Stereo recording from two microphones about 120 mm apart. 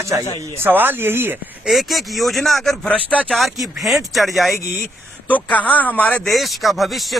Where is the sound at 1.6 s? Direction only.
Centre (ahead or behind).